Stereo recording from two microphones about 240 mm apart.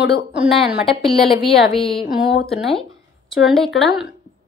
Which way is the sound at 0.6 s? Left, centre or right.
Centre.